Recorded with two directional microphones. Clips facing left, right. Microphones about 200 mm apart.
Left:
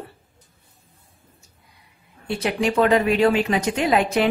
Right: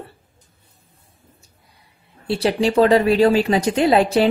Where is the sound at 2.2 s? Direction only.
30° right (ahead or behind).